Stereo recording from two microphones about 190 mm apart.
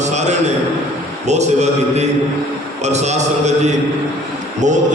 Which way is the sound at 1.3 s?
35° right (ahead or behind).